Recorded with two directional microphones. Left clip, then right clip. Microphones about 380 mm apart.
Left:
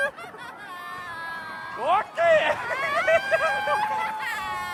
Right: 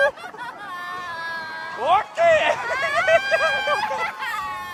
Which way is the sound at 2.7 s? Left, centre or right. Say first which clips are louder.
Right 4 dB; right.